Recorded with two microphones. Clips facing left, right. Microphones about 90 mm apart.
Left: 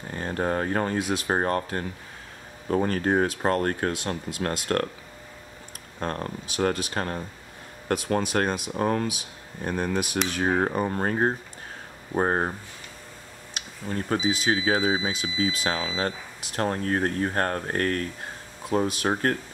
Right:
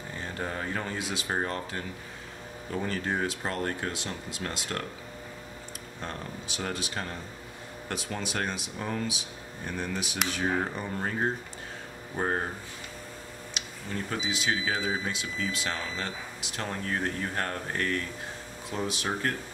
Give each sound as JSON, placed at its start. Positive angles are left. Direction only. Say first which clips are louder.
{"t": 0.1, "sound": "speech", "louder": "left 9 dB", "side_deg": 50}
{"t": 5.9, "sound": "speech", "louder": "left 8 dB", "side_deg": 50}
{"t": 13.6, "sound": "speech", "louder": "left 5 dB", "side_deg": 45}